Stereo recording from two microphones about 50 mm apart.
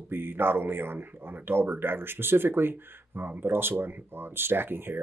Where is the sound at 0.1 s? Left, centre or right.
Right.